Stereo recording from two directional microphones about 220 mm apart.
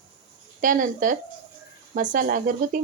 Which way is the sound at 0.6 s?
35° right (ahead or behind).